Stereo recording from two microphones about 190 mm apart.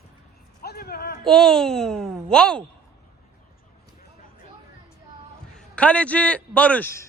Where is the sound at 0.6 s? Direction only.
55° left (ahead or behind).